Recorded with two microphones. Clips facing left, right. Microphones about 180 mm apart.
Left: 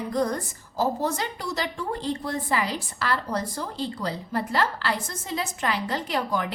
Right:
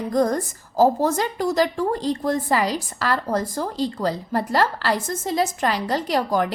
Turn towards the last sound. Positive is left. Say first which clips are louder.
# right 6 dB
turn(degrees=-40)  # may be behind; listen again after turning